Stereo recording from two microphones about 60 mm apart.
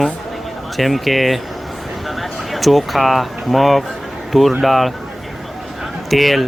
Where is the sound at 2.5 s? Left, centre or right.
Centre.